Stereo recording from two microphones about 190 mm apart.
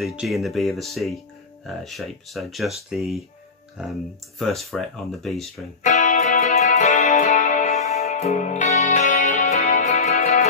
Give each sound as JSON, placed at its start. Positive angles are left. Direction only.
{"t": 0.0, "sound": "speech", "side_deg": -5}
{"t": 5.9, "sound": "music", "side_deg": 40}